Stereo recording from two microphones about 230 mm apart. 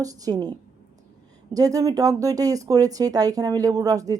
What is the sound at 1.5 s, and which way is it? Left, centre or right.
Speech, centre.